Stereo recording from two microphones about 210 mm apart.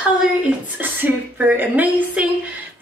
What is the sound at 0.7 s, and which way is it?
A woman's voice, 10° right (ahead or behind).